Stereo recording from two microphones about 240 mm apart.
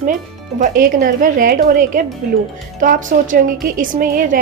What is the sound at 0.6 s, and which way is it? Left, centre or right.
A woman's voice, right.